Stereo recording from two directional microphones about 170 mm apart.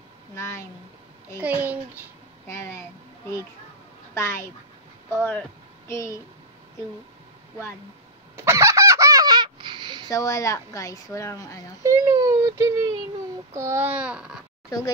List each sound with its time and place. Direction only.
0.4 s speech: 15° left (ahead or behind)
1.4 s a child's voice: 10° right (ahead or behind)
2.4 s speech: 15° left (ahead or behind)
4.1 s a woman's voice: 15° left (ahead or behind)
8.4 s fowl: 15° right (ahead or behind)
10.0 s speech: 20° left (ahead or behind)
11.8 s a child's voice: 20° right (ahead or behind)